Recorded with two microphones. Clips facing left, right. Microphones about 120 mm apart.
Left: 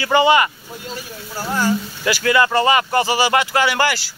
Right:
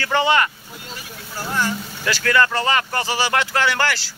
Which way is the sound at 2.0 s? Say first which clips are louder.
Left 2 dB; 10° left (ahead or behind).